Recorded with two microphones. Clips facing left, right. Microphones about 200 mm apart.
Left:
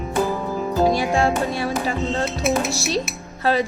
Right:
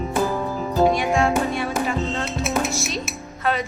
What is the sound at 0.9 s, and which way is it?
Speech, 35° left (ahead or behind).